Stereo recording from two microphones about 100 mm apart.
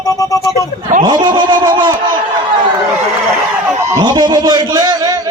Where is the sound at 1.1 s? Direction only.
50° right (ahead or behind).